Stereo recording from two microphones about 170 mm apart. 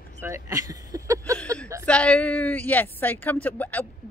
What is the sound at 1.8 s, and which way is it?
Speech, 5° left (ahead or behind).